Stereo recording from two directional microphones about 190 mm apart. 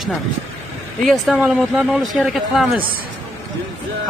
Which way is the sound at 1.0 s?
Centre (ahead or behind).